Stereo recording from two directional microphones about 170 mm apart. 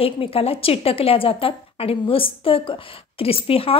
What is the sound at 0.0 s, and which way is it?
A woman's voice, 35° left (ahead or behind).